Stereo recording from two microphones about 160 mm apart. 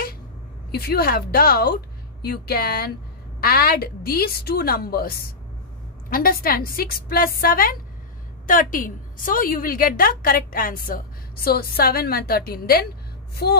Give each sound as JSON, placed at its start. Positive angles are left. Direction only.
{"t": 0.7, "sound": "a woman's voice", "side_deg": 75}
{"t": 13.4, "sound": "speech", "side_deg": 90}